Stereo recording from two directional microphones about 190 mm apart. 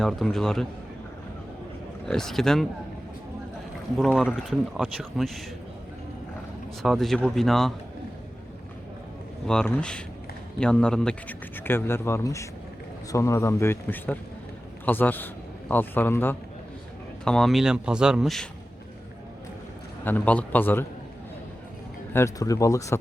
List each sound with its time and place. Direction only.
0.0 s speech: centre (ahead or behind)
2.0 s speech: centre (ahead or behind)
3.9 s speech: centre (ahead or behind)
6.8 s speech: centre (ahead or behind)
9.5 s speech: 5° left (ahead or behind)
20.1 s speech: 10° left (ahead or behind)
22.1 s speech: 15° left (ahead or behind)